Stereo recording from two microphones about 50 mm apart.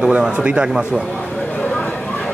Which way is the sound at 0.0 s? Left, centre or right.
Centre.